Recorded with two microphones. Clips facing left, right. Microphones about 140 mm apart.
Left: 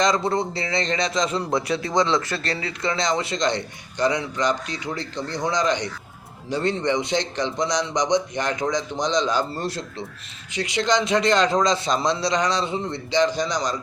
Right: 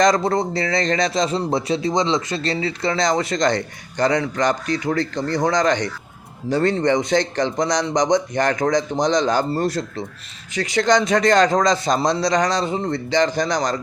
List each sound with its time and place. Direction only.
0.0 s a man's voice: 40° right (ahead or behind)
10.8 s a man's voice: 45° right (ahead or behind)